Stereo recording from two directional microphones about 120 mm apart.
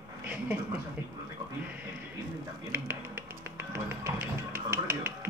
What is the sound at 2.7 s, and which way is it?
Music, 20° right (ahead or behind).